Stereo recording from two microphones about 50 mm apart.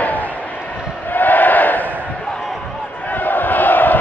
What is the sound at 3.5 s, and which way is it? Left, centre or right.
Crowd, left.